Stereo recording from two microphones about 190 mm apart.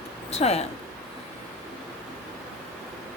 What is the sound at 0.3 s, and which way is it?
Speech, 35° left (ahead or behind).